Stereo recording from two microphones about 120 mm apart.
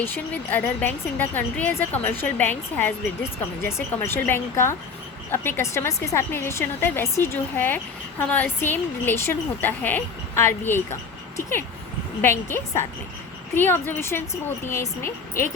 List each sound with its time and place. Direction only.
0.0 s a woman's voice: 15° left (ahead or behind)